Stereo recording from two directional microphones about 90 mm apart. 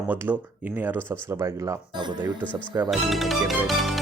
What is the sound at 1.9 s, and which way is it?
Speech, 55° right (ahead or behind).